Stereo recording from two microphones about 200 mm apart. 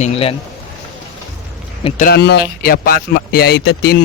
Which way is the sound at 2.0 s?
50° left (ahead or behind).